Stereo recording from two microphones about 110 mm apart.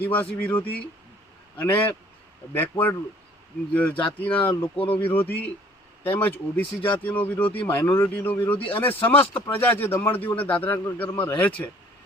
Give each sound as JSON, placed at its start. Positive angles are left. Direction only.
{"t": 0.0, "sound": "a man's voice", "side_deg": 15}